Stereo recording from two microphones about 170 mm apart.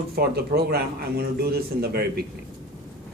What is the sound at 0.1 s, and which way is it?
Speech, 70° right (ahead or behind).